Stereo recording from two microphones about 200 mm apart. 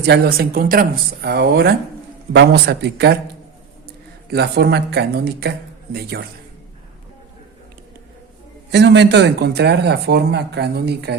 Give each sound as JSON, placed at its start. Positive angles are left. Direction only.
{"t": 0.0, "sound": "speech", "side_deg": -55}
{"t": 4.3, "sound": "speech", "side_deg": -55}
{"t": 8.7, "sound": "speech", "side_deg": -60}